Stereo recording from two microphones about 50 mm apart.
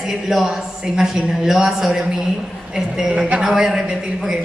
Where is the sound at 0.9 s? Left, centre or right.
Centre.